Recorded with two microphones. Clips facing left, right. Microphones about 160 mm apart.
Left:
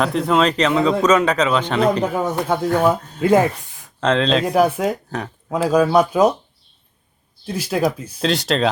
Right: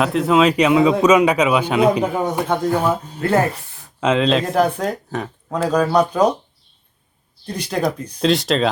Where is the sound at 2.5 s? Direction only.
5° left (ahead or behind).